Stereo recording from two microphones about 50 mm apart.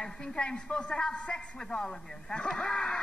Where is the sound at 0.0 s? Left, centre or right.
Centre.